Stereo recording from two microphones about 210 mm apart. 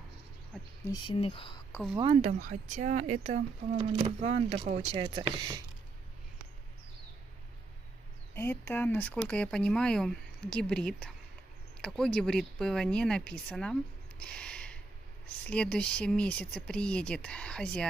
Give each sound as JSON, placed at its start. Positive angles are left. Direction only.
{"t": 0.8, "sound": "speech", "side_deg": 25}
{"t": 1.7, "sound": "speech", "side_deg": 0}
{"t": 2.0, "sound": "speech", "side_deg": -25}
{"t": 2.4, "sound": "speech", "side_deg": -35}
{"t": 8.4, "sound": "speech", "side_deg": 10}
{"t": 14.2, "sound": "a sound", "side_deg": 5}
{"t": 15.2, "sound": "speech", "side_deg": 5}